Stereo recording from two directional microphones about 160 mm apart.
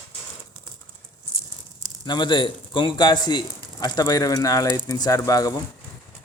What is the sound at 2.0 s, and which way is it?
A man's voice, 30° left (ahead or behind).